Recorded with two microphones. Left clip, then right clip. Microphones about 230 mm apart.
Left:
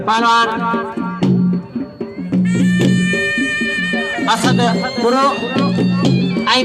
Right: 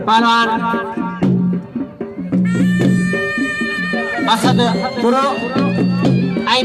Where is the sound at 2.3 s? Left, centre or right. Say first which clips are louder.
Even; centre.